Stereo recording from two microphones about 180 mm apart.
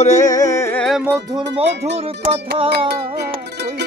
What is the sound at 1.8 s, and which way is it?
Music, 35° right (ahead or behind).